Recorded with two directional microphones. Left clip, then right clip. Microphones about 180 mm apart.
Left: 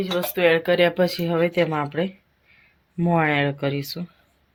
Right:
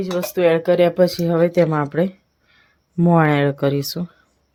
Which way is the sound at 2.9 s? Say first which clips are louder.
Right 4 dB; 60° right (ahead or behind).